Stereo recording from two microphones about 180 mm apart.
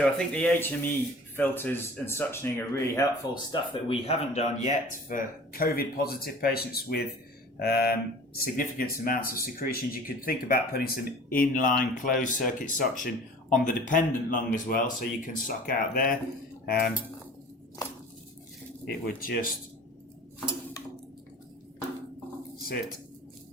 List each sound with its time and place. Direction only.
0.3 s speech: 10° left (ahead or behind); by 16.9 s 55° left (ahead or behind)
18.9 s speech: 60° left (ahead or behind)